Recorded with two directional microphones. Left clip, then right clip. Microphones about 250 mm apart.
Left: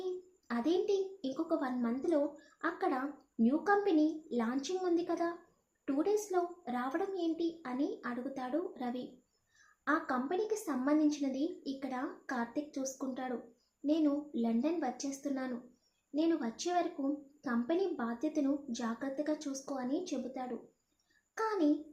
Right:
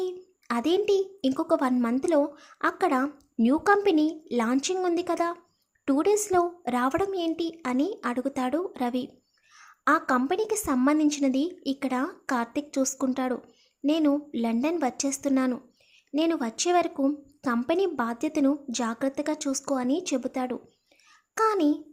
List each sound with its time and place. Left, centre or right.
0.4 s a woman's voice: right